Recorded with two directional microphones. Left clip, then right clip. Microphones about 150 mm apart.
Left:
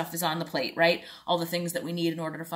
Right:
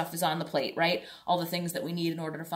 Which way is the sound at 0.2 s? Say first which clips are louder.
Even; 10° left (ahead or behind).